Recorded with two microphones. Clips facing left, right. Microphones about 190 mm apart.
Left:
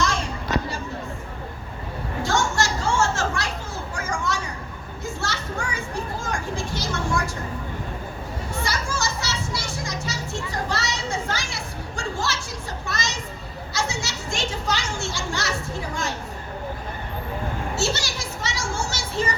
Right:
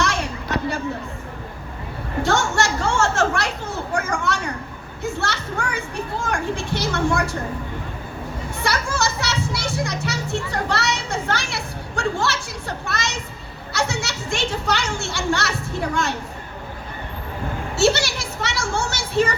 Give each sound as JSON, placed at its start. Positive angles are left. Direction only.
{"t": 2.2, "sound": "children playing", "side_deg": -65}
{"t": 5.0, "sound": "a child's voice", "side_deg": -65}
{"t": 8.6, "sound": "children playing", "side_deg": -65}
{"t": 17.7, "sound": "a sound", "side_deg": -65}